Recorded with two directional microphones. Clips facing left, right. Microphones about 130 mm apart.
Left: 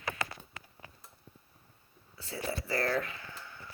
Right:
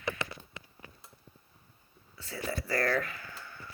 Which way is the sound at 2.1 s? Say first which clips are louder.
Even; 35° left (ahead or behind).